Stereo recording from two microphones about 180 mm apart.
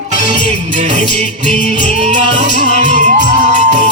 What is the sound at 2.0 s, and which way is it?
Speech, 40° right (ahead or behind).